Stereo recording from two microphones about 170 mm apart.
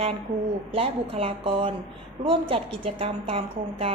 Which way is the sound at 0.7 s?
35° right (ahead or behind).